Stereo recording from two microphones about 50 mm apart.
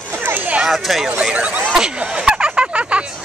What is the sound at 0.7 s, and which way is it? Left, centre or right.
Speech, centre.